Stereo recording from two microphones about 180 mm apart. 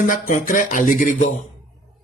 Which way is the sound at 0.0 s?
50° left (ahead or behind).